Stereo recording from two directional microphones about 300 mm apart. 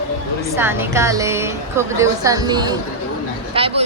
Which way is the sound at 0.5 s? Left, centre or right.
Centre.